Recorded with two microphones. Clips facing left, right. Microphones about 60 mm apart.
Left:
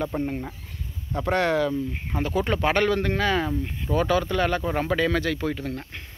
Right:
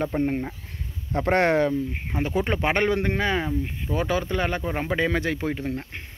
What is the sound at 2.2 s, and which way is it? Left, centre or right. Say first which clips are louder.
Speech: left 1 dB; right.